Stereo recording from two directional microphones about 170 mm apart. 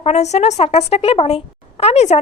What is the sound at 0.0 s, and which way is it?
Speech, 40° left (ahead or behind).